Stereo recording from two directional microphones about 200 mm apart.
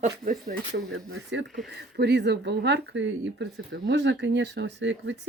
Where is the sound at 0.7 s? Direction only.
65° right (ahead or behind).